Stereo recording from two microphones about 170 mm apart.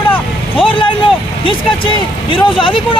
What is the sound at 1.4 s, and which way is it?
Speech, 30° left (ahead or behind).